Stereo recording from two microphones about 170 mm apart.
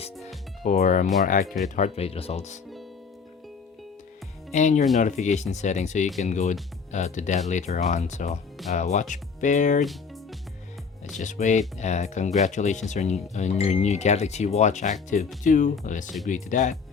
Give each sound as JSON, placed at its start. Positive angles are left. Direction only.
{"t": 0.6, "sound": "speech", "side_deg": 45}
{"t": 4.5, "sound": "speech", "side_deg": 45}
{"t": 11.2, "sound": "speech", "side_deg": 45}